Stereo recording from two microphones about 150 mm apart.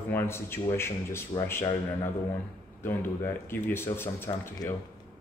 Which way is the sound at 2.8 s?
15° left (ahead or behind).